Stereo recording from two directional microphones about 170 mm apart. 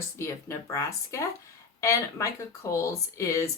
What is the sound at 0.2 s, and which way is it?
Speech, 15° left (ahead or behind).